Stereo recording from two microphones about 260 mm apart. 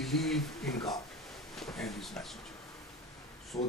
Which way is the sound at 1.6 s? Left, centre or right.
Centre.